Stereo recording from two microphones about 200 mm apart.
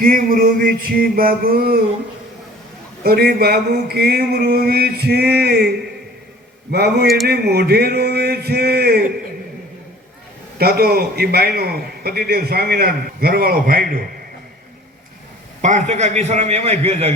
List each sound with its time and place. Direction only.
0.0 s a man's voice: 45° right (ahead or behind)
3.0 s a man's voice: 50° right (ahead or behind)
10.6 s a man's voice: 50° right (ahead or behind)
15.6 s a man's voice: 35° right (ahead or behind)